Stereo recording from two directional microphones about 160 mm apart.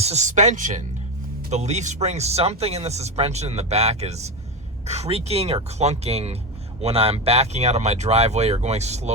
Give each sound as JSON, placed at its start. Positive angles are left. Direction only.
{"t": 0.0, "sound": "speech", "side_deg": -45}